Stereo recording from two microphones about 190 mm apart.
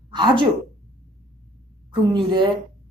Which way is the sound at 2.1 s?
25° right (ahead or behind).